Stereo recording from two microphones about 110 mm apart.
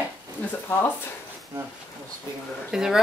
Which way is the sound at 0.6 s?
20° left (ahead or behind).